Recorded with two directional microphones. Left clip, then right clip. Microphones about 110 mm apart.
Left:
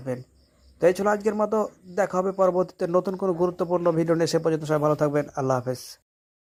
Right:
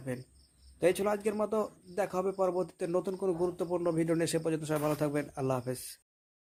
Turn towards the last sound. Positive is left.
turn(degrees=-15)  # may be behind; listen again after turning